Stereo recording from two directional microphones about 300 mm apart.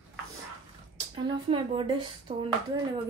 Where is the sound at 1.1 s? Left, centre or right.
Centre.